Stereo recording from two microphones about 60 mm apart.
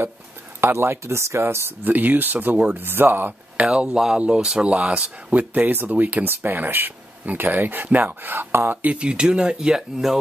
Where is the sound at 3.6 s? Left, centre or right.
Centre; by 8.9 s right.